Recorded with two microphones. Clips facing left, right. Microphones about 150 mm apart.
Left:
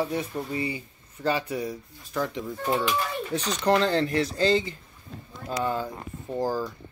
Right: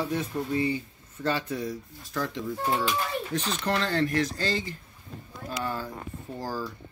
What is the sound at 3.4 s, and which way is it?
Speech, 40° left (ahead or behind).